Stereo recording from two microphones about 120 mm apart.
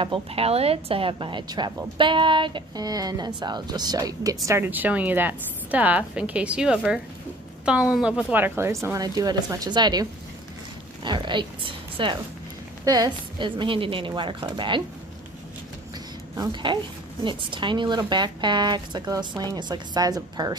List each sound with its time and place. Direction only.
0.0 s a woman's voice: 50° right (ahead or behind); by 9.0 s 20° right (ahead or behind)
9.0 s a woman's voice: 30° right (ahead or behind)
11.1 s a woman's voice: 40° right (ahead or behind)
16.3 s a woman's voice: 40° right (ahead or behind)